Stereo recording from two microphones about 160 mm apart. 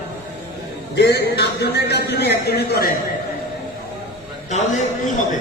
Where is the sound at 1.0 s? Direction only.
90° left.